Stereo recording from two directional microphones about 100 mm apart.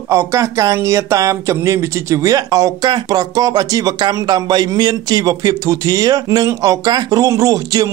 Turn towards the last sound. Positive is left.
turn(degrees=-35)  # may be behind; listen again after turning